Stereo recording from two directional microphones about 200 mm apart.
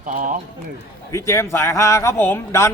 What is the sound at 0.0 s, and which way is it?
Speech, 40° right (ahead or behind).